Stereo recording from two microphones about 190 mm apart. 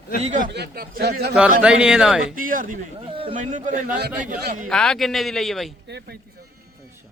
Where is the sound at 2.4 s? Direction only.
45° right (ahead or behind).